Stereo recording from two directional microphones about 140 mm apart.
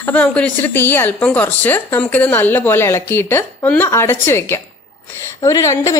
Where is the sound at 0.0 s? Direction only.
10° left (ahead or behind).